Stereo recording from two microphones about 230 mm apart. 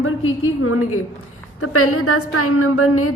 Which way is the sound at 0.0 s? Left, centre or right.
Left.